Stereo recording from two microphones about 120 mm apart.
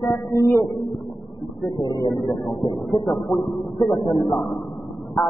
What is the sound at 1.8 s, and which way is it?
Speech, 35° left (ahead or behind).